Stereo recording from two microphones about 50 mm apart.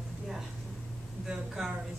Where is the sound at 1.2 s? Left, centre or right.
Centre.